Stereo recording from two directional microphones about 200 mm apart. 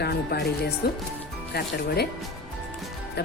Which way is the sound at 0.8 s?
55° left (ahead or behind).